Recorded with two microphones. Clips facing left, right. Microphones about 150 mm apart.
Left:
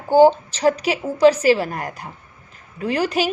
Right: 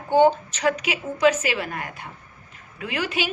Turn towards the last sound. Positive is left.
turn(degrees=40)  # may be behind; listen again after turning